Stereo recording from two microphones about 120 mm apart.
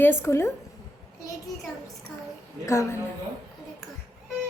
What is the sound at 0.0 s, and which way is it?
Speech, 20° left (ahead or behind).